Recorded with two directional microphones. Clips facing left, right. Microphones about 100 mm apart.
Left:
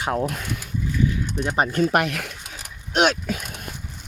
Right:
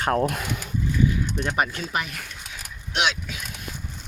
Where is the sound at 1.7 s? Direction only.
45° left (ahead or behind).